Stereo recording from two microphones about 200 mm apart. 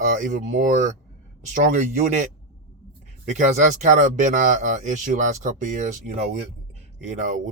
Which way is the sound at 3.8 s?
40° right (ahead or behind).